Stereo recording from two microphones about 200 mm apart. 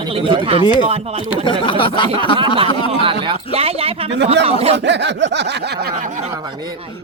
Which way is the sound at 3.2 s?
30° right (ahead or behind).